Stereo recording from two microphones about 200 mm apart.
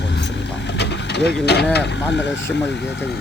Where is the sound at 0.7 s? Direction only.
60° left (ahead or behind).